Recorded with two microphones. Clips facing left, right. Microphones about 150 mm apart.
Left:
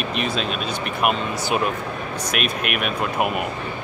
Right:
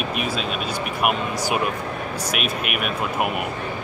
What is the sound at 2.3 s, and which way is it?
Speech, 5° right (ahead or behind).